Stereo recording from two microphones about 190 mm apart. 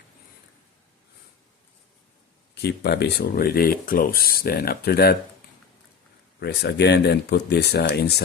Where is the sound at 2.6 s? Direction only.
55° left (ahead or behind).